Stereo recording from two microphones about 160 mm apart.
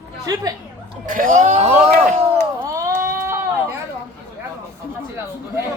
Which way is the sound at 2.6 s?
20° right (ahead or behind).